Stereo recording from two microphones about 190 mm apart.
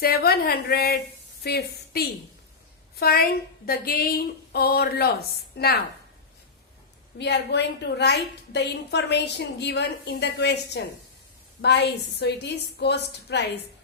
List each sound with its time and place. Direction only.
0.0 s a woman's voice: 55° left (ahead or behind)
7.2 s a woman's voice: 65° left (ahead or behind)